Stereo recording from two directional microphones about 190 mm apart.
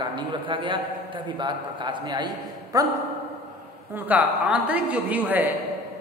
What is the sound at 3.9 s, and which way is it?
A woman's voice, 10° right (ahead or behind).